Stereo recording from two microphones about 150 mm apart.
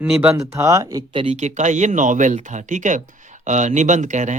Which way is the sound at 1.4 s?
50° right (ahead or behind).